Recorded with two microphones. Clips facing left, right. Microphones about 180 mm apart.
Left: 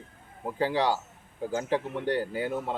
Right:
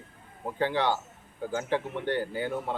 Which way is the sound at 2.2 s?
5° left (ahead or behind).